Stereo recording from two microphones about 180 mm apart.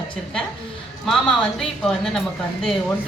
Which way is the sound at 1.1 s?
Centre (ahead or behind).